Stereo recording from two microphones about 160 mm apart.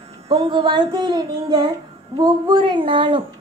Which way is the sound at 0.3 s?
30° right (ahead or behind).